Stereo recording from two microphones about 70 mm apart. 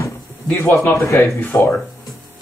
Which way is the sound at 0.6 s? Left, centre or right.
Left.